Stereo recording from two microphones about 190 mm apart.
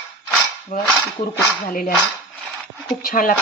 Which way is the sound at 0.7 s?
45° left (ahead or behind).